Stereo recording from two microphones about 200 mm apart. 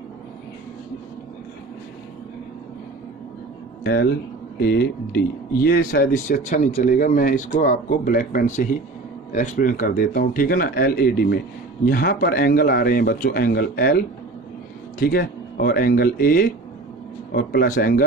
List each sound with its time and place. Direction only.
3.8 s speech: 55° left (ahead or behind)